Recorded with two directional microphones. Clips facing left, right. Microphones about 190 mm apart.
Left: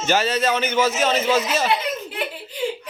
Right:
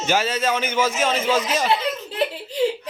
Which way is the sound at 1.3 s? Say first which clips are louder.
Left 1 dB; 10° left (ahead or behind).